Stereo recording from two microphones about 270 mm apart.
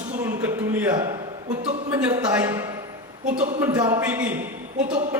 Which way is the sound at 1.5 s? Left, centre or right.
Right.